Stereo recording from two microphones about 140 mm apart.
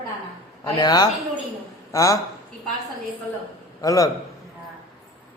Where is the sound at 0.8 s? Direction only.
30° left (ahead or behind).